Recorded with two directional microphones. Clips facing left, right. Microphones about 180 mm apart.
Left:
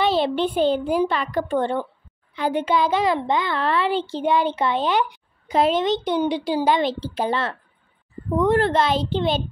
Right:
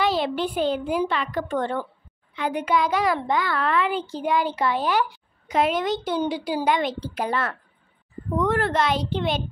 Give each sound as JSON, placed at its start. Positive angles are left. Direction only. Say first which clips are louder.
{"t": 0.0, "sound": "a child's voice", "louder": "left 3 dB", "side_deg": 25}